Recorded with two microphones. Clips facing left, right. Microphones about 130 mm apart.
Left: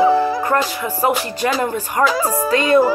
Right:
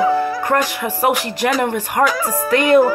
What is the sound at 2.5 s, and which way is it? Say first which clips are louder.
Speech: right 2 dB; 65° right (ahead or behind).